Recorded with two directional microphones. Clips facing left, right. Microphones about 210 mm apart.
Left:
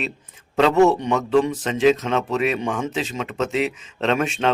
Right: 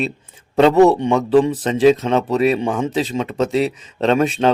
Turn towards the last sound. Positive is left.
turn(degrees=-35)  # may be behind; listen again after turning